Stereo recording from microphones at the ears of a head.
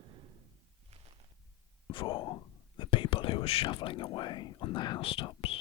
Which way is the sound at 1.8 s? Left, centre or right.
Left.